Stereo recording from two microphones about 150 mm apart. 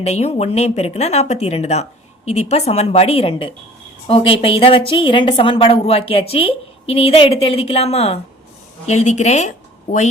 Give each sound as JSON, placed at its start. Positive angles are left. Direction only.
{"t": 0.0, "sound": "a woman's voice", "side_deg": 45}